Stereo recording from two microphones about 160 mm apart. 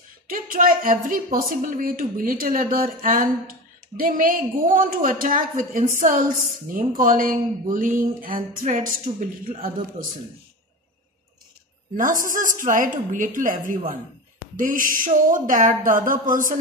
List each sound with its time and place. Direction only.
0.3 s a woman's voice: 60° right (ahead or behind)
12.0 s a woman's voice: 55° right (ahead or behind)